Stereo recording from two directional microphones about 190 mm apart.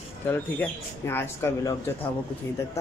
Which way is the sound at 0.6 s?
10° left (ahead or behind).